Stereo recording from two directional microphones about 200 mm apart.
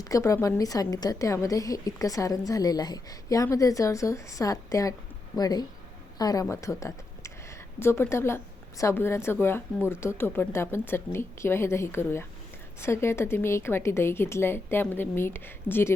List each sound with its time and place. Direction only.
0.0 s a woman's voice: 15° left (ahead or behind)